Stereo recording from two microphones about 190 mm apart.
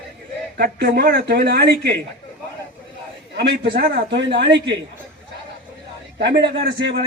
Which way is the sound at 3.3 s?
65° right (ahead or behind).